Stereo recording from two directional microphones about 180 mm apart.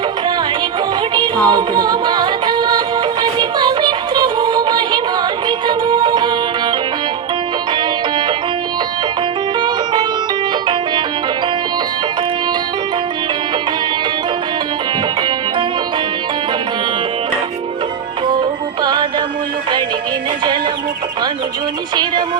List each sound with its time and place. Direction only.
1.1 s music: 25° right (ahead or behind)
9.6 s music: 25° right (ahead or behind)
18.3 s music: 25° right (ahead or behind)